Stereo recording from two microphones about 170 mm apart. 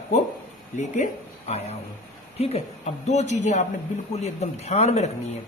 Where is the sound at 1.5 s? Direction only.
40° left (ahead or behind).